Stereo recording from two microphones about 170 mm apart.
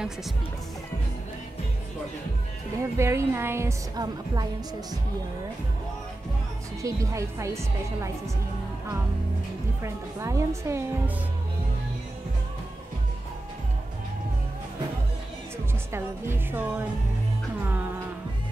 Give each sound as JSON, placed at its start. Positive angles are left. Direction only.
{"t": 3.0, "sound": "a woman's voice", "side_deg": -15}
{"t": 6.8, "sound": "a woman's voice", "side_deg": -20}
{"t": 9.8, "sound": "a woman's voice", "side_deg": -15}
{"t": 15.9, "sound": "a woman's voice", "side_deg": -15}
{"t": 17.6, "sound": "music", "side_deg": -10}